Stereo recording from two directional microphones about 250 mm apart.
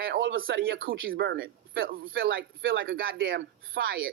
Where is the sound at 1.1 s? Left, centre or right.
Right.